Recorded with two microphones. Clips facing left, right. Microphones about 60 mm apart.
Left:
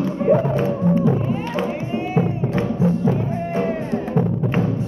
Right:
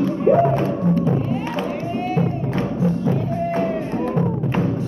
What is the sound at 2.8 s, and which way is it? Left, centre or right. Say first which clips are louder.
Music: left 2 dB; centre.